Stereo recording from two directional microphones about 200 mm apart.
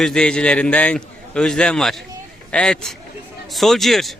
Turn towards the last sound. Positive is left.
turn(degrees=0)  # may be behind; listen again after turning